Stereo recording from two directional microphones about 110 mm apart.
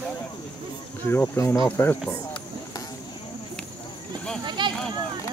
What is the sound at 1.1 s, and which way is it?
Speech, 25° left (ahead or behind).